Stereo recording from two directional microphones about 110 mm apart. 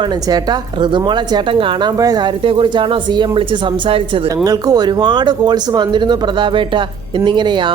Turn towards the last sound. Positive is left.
turn(degrees=-45)  # may be behind; listen again after turning